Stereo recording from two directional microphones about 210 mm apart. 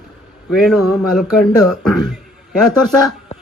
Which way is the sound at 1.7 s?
Centre (ahead or behind).